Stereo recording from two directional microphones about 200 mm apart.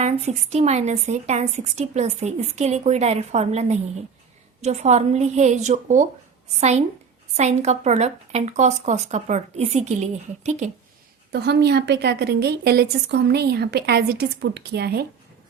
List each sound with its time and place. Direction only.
0.0 s speech: 35° right (ahead or behind)
11.3 s a woman's voice: 55° right (ahead or behind)